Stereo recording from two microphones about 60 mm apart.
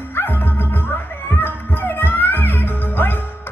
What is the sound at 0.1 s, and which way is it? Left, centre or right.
Music, left.